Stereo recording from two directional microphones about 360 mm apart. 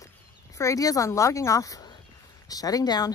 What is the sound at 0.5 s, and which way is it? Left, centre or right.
Speech, centre.